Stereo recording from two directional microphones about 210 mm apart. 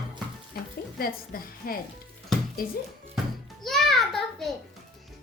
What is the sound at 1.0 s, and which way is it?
Speech, 45° left (ahead or behind).